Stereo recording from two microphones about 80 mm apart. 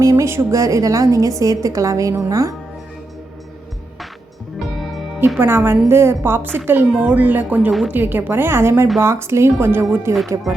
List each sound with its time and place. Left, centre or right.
0.0 s a woman's voice: right
4.7 s music: centre
5.4 s a woman's voice: right